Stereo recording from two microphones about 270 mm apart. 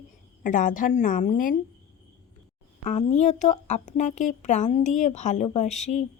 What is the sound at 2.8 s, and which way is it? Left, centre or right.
A woman's voice, left.